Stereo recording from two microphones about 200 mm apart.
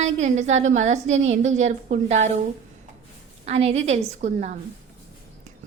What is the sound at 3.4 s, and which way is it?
A woman's voice, 30° right (ahead or behind).